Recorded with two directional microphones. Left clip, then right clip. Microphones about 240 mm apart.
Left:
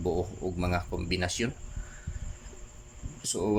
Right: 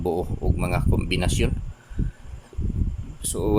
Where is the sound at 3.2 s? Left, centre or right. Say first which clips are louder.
Right 4 dB; centre.